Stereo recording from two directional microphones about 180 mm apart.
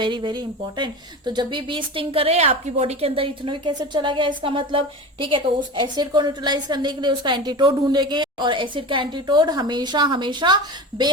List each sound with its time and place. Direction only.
0.0 s a woman's voice: 25° right (ahead or behind)
5.8 s a woman's voice: 25° right (ahead or behind)